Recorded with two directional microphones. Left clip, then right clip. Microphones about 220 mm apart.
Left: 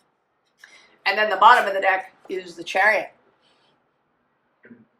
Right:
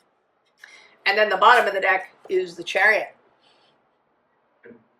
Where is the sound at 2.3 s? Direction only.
20° left (ahead or behind).